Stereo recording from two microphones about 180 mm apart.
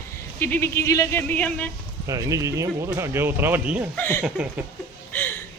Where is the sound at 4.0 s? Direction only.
10° left (ahead or behind).